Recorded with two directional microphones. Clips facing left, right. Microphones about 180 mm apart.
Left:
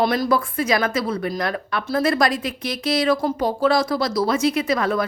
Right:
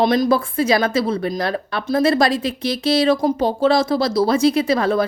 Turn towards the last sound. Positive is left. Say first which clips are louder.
# right 4 dB
turn(degrees=-30)  # may be behind; listen again after turning